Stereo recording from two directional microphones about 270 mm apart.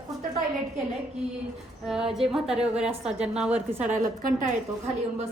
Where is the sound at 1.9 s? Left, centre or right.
Centre.